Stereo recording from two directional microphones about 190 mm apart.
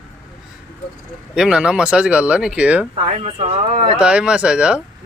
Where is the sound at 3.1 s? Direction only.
30° right (ahead or behind).